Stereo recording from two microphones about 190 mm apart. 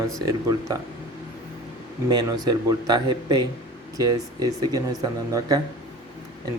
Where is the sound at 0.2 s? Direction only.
20° right (ahead or behind).